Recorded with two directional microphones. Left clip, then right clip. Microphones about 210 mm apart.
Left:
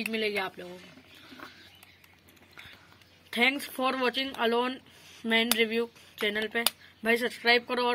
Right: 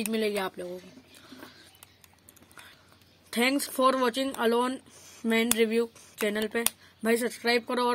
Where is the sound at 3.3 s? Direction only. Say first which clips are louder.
Left 1 dB; 55° right (ahead or behind).